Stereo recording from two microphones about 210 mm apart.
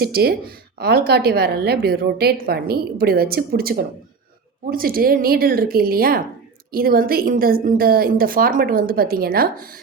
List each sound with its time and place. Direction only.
0.0 s a woman's voice: 50° right (ahead or behind)